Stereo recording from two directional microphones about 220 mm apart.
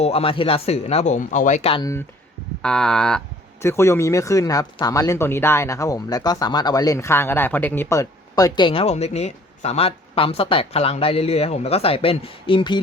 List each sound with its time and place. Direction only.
0.0 s speech: 25° left (ahead or behind)
2.6 s speech: 5° left (ahead or behind); by 12.8 s 20° left (ahead or behind)